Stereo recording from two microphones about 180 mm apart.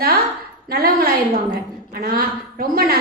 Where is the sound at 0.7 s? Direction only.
55° right (ahead or behind).